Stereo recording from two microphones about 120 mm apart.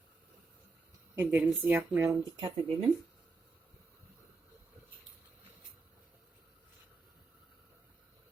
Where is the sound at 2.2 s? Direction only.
40° right (ahead or behind).